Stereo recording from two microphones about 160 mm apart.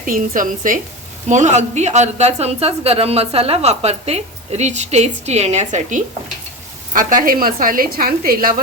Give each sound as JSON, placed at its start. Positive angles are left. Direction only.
{"t": 0.0, "sound": "a woman's voice", "side_deg": -55}
{"t": 6.9, "sound": "a woman's voice", "side_deg": -55}